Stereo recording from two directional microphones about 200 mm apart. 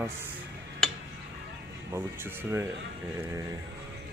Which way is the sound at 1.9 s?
10° right (ahead or behind).